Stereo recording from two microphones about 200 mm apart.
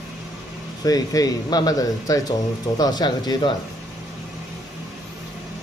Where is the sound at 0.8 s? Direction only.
20° left (ahead or behind).